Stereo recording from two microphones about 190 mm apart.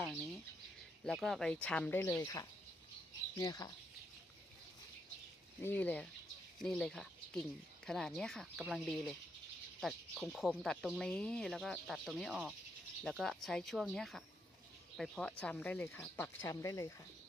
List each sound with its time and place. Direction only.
1.0 s speech: centre (ahead or behind); by 3.7 s 20° left (ahead or behind)
5.6 s speech: 10° left (ahead or behind)